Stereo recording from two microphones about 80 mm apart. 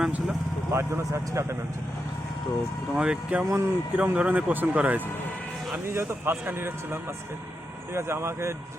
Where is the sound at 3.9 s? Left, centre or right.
Centre.